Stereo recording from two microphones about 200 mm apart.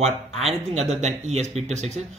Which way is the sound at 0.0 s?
30° right (ahead or behind).